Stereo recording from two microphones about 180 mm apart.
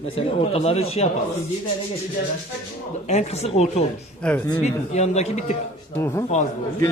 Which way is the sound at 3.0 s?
35° left (ahead or behind).